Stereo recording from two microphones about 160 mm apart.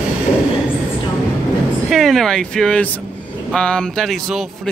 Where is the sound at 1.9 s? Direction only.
Centre (ahead or behind).